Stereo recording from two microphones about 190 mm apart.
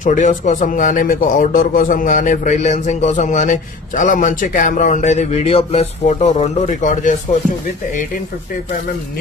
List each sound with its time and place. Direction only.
0.0 s speech: 40° left (ahead or behind)